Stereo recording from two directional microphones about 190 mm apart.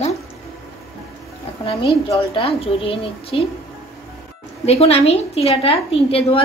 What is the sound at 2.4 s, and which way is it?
A woman's voice, 30° left (ahead or behind).